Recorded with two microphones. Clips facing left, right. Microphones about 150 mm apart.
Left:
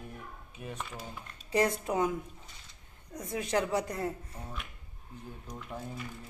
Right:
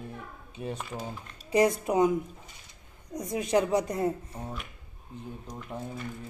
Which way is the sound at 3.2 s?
15° right (ahead or behind).